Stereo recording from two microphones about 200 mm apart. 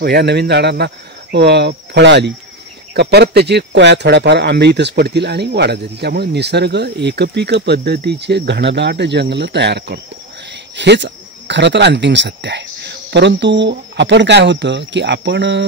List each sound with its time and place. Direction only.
0.0 s speech: 55° right (ahead or behind)